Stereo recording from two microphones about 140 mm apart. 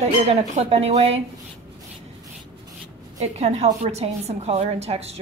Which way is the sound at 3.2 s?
50° right (ahead or behind).